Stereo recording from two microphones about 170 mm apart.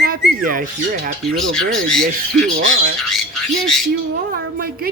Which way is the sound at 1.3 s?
5° left (ahead or behind).